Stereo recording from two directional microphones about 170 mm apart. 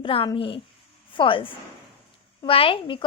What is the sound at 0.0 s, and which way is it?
A woman's voice, 30° left (ahead or behind).